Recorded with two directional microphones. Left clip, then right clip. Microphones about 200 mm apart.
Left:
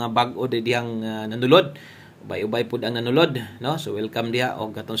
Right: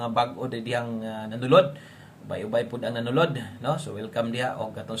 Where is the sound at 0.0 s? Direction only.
35° left (ahead or behind).